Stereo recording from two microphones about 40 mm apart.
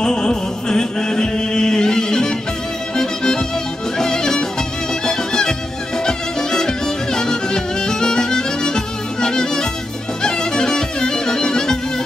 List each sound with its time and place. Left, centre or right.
0.0 s music: centre